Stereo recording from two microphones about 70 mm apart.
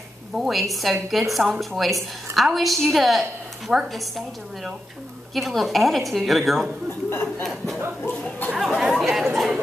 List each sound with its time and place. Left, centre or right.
0.4 s a woman's voice: centre
5.3 s a woman's voice: centre
7.1 s a sound: left
7.4 s a woman's voice: centre
8.5 s chatter: centre